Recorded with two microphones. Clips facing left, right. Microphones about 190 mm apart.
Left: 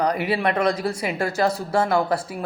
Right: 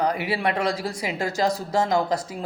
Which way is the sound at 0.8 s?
15° right (ahead or behind).